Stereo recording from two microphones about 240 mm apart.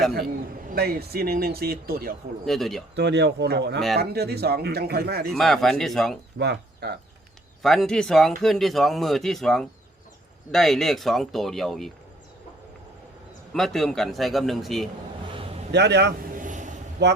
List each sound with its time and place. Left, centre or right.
0.7 s speech: right
2.5 s speech: centre
2.9 s speech: right
5.3 s speech: centre
6.4 s speech: right
7.6 s speech: centre
13.5 s speech: centre
15.7 s a sound: right
17.0 s speech: right